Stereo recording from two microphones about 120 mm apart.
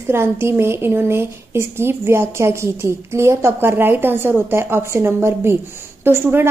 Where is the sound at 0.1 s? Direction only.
20° right (ahead or behind).